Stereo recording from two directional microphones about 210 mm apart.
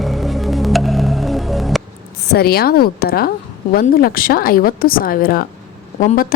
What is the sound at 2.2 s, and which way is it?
A woman's voice, 50° left (ahead or behind).